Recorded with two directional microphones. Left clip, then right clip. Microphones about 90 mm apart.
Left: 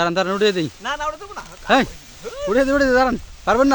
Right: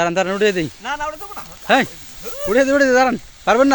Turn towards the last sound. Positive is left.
turn(degrees=-15)  # may be behind; listen again after turning